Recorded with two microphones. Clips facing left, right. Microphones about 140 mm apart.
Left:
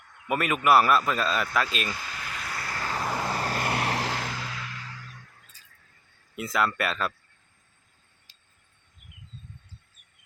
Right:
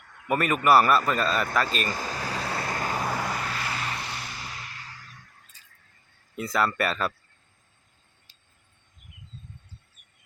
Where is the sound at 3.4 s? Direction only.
45° left (ahead or behind); by 4.5 s 90° left.